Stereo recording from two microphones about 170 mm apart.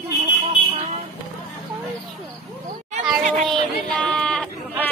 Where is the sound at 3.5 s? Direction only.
5° left (ahead or behind).